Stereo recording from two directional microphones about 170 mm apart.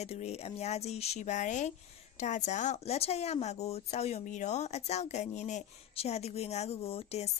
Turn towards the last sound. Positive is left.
turn(degrees=35)  # may be behind; listen again after turning